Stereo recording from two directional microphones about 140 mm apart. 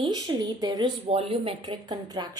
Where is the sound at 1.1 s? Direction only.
45° right (ahead or behind).